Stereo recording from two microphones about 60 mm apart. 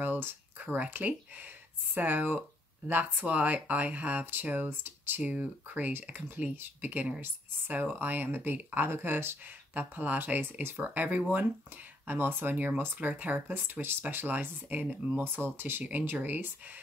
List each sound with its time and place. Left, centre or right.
0.0 s a sound: right
0.8 s speech: right
5.2 s speech: right
11.3 s speech: right
15.9 s speech: right